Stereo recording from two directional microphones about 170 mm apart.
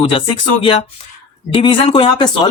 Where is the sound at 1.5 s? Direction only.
30° left (ahead or behind).